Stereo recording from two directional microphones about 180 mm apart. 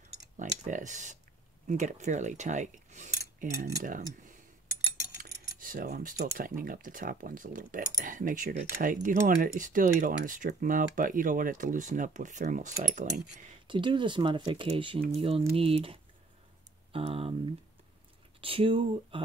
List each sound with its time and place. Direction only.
0.4 s speech: 45° right (ahead or behind)
1.7 s mechanisms: 40° right (ahead or behind)
3.8 s speech: 50° right (ahead or behind)
5.6 s speech: 50° right (ahead or behind)
13.7 s speech: 25° right (ahead or behind)
18.4 s speech: 30° right (ahead or behind)